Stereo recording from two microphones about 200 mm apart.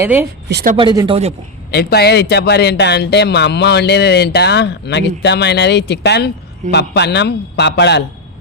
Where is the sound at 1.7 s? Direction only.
50° left (ahead or behind).